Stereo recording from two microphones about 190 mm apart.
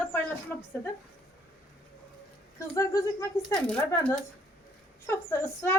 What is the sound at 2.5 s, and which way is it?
Speech, 20° left (ahead or behind).